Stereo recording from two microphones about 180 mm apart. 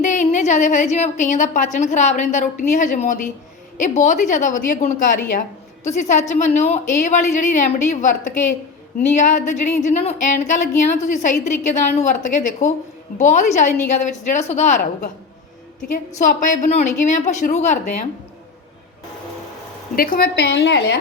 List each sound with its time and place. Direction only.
0.0 s a woman's voice: 40° left (ahead or behind)
9.1 s a woman's voice: 45° left (ahead or behind)
16.1 s speech: 45° left (ahead or behind)
20.0 s a woman's voice: 55° left (ahead or behind); by 21.0 s 70° left (ahead or behind)